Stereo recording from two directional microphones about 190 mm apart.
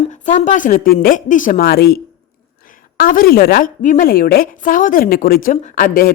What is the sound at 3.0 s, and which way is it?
A woman's voice, 45° left (ahead or behind).